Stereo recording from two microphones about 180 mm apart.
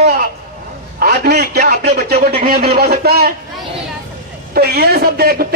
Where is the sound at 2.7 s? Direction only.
60° right (ahead or behind).